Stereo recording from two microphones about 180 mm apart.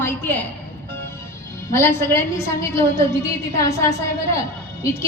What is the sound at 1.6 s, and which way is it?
A woman's voice, 15° left (ahead or behind).